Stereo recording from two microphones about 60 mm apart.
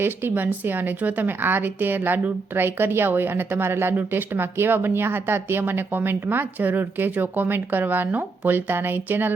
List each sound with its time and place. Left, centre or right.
0.0 s a woman's voice: right